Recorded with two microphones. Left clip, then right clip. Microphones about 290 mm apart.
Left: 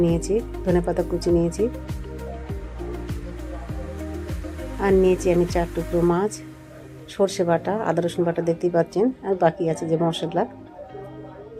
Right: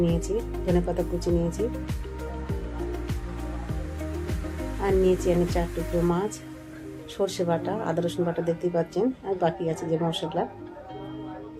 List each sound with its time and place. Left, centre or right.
0.0 s speech: centre
4.8 s speech: centre